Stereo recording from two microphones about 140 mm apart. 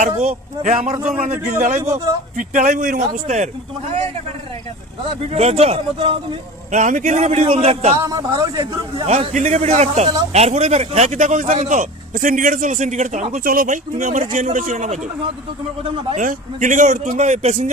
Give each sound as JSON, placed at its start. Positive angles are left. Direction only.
{"t": 0.2, "sound": "a man's voice", "side_deg": -60}
{"t": 1.8, "sound": "a man's voice", "side_deg": -20}
{"t": 2.3, "sound": "a man's voice", "side_deg": -70}
{"t": 5.3, "sound": "a man's voice", "side_deg": -50}
{"t": 6.7, "sound": "a man's voice", "side_deg": -60}
{"t": 7.9, "sound": "a man's voice", "side_deg": -25}
{"t": 9.0, "sound": "a man's voice", "side_deg": -55}
{"t": 16.1, "sound": "a man's voice", "side_deg": -65}